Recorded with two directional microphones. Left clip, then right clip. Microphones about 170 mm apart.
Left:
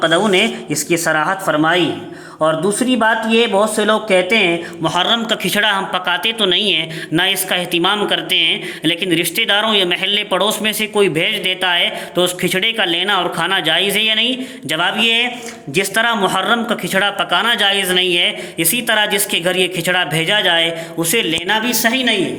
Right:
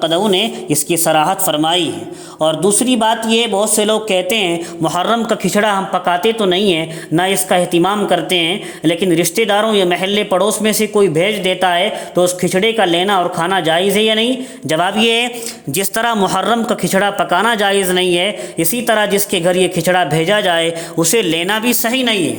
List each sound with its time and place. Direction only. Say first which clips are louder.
0.9 s speech: right 2 dB; 25° right (ahead or behind)
4.2 s speech: left 2 dB; 35° right (ahead or behind)
4.8 s a man's voice: right 1 dB; 55° right (ahead or behind); by 15.3 s 80° right
15.7 s speech: left 1 dB; 90° right